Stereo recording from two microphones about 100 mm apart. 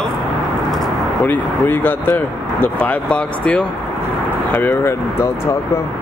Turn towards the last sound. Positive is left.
turn(degrees=25)  # may be behind; listen again after turning